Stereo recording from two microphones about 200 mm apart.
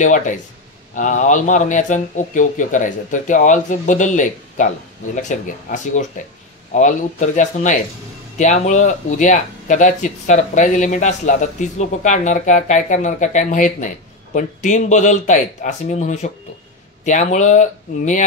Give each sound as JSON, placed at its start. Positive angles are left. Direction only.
{"t": 0.0, "sound": "speech", "side_deg": 40}